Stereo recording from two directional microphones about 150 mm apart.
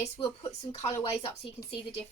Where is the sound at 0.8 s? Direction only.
40° left (ahead or behind).